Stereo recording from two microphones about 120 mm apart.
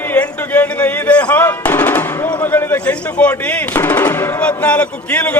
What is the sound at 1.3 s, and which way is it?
Gunshot, 15° left (ahead or behind).